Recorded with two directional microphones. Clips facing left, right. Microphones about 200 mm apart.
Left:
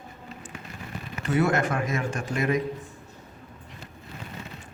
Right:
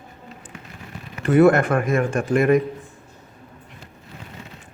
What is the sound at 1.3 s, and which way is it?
Mantra, 55° right (ahead or behind).